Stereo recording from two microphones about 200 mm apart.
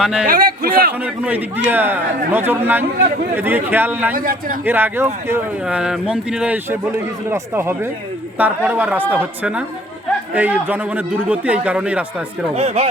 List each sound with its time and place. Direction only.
0.0 s a man's voice: 5° right (ahead or behind)
0.3 s a man's voice: 45° right (ahead or behind)
0.9 s speech: 10° right (ahead or behind)
4.1 s a man's voice: 45° right (ahead or behind)
4.6 s speech: 10° right (ahead or behind)
12.5 s speech: 30° right (ahead or behind)